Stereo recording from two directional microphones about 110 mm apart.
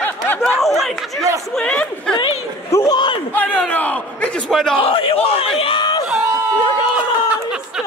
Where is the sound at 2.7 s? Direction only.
25° left (ahead or behind).